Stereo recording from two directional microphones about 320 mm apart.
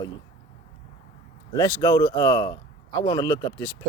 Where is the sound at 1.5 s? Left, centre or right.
Centre.